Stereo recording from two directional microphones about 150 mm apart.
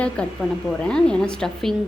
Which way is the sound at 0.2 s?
5° left (ahead or behind).